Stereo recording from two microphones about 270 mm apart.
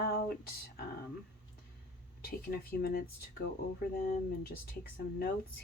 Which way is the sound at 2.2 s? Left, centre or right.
Left.